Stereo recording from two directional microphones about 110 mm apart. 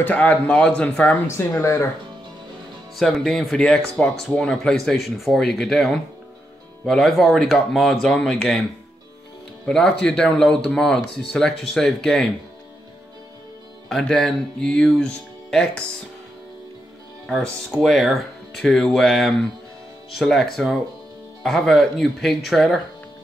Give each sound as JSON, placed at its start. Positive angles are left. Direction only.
{"t": 0.0, "sound": "speech", "side_deg": 15}
{"t": 1.2, "sound": "speech", "side_deg": 25}
{"t": 3.0, "sound": "speech", "side_deg": 0}
{"t": 9.7, "sound": "speech", "side_deg": 5}
{"t": 13.8, "sound": "speech", "side_deg": 5}
{"t": 17.3, "sound": "speech", "side_deg": 5}